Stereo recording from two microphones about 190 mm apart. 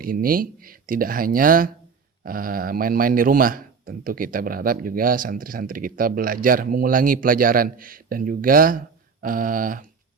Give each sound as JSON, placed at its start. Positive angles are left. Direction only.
{"t": 0.0, "sound": "speech", "side_deg": -50}